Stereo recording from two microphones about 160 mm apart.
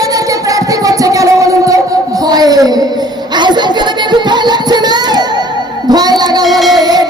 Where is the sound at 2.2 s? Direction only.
25° right (ahead or behind).